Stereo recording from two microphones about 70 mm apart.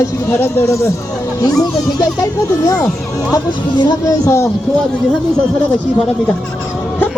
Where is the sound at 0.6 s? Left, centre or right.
Left.